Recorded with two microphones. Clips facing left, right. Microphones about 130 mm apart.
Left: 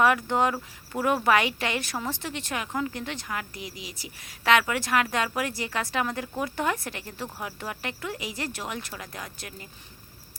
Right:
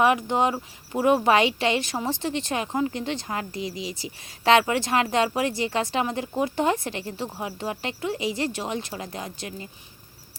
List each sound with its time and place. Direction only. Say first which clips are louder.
0.0 s speech: right 2 dB; 20° right (ahead or behind)